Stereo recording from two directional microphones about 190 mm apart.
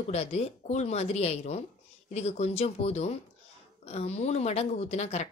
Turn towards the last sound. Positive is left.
turn(degrees=35)  # may be behind; listen again after turning